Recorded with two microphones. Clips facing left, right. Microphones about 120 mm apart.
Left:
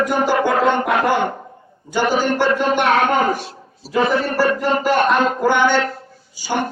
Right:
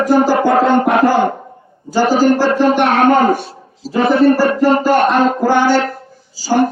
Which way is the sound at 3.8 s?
90° right.